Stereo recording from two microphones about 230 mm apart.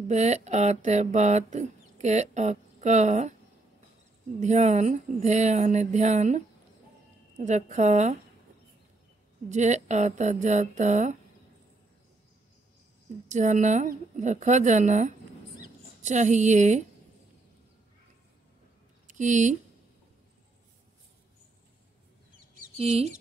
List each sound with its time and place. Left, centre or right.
0.1 s speech: right
4.4 s speech: right
9.5 s speech: right
13.3 s speech: right
19.0 s speech: right
22.5 s chicken: right